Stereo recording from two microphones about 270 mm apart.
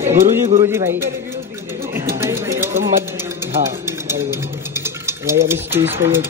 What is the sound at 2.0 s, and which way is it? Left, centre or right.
Music, centre.